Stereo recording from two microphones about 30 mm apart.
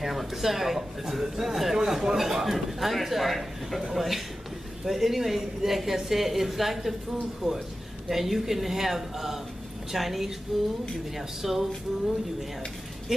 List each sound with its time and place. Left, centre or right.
0.0 s a man's voice: centre
8.1 s a man's voice: centre